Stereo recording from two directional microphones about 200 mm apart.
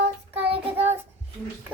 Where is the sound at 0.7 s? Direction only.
35° right (ahead or behind).